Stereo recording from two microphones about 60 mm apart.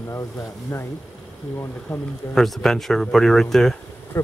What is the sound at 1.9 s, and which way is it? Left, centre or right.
Speech, left.